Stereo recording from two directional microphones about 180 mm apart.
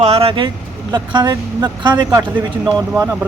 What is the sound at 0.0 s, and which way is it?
Speech, 35° right (ahead or behind).